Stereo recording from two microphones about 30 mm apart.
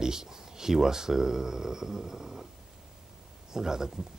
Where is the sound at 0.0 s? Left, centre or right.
Centre.